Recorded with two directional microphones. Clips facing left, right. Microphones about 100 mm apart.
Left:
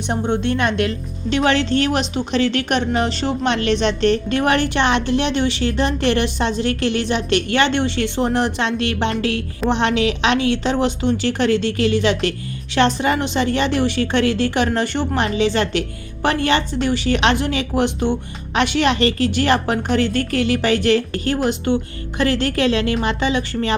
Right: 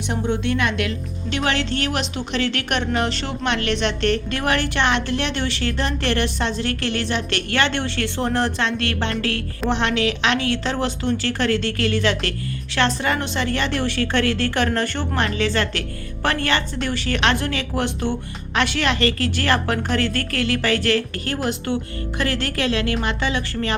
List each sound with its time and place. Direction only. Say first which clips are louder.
0.1 s speech: left 3 dB; 30° left (ahead or behind)
5.6 s a woman's voice: left 3 dB; 15° left (ahead or behind)
9.6 s a woman's voice: left 3 dB; centre (ahead or behind)
10.2 s a woman's voice: left 4 dB; 20° left (ahead or behind)